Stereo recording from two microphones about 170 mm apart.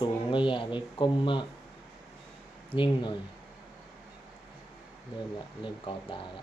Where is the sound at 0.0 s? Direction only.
30° left (ahead or behind).